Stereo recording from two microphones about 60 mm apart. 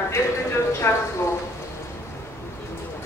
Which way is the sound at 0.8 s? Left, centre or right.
Left.